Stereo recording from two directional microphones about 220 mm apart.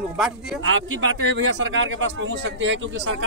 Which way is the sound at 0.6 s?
60° right (ahead or behind).